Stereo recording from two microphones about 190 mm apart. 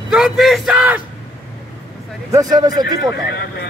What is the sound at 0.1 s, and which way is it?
Speech, centre (ahead or behind).